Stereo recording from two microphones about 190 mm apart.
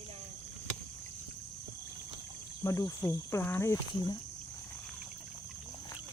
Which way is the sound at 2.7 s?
15° left (ahead or behind).